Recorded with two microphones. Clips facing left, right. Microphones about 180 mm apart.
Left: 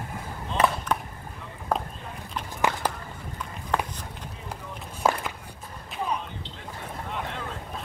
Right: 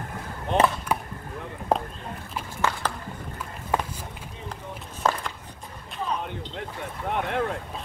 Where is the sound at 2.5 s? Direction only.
15° left (ahead or behind).